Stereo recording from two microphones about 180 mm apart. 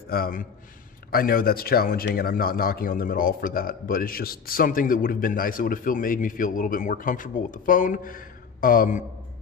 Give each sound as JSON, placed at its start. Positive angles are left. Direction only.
{"t": 0.1, "sound": "speech", "side_deg": 50}